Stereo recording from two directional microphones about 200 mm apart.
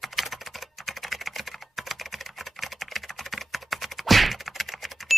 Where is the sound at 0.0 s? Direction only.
Centre (ahead or behind).